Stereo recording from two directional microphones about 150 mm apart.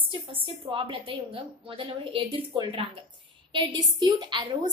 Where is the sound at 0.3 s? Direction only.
35° right (ahead or behind).